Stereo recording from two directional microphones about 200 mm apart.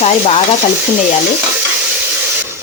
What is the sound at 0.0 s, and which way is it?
Speech, 30° left (ahead or behind).